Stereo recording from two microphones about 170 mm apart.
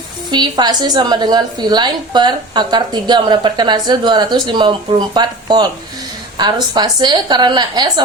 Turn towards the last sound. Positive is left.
turn(degrees=-25)  # may be behind; listen again after turning